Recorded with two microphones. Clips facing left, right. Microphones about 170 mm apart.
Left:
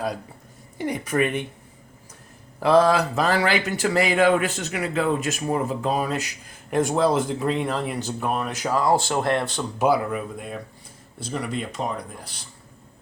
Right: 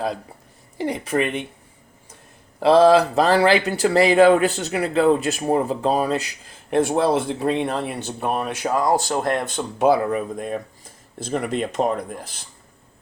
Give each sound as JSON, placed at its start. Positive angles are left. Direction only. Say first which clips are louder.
{"t": 0.8, "sound": "speech", "louder": "right 1 dB", "side_deg": -25}
{"t": 2.6, "sound": "speech", "louder": "right 4 dB", "side_deg": -25}
{"t": 9.6, "sound": "speech", "louder": "right 3 dB", "side_deg": -30}
{"t": 10.1, "sound": "speech", "louder": "right 5 dB", "side_deg": -40}